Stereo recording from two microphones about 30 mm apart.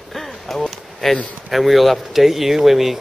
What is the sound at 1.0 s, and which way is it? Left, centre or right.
Speech, centre.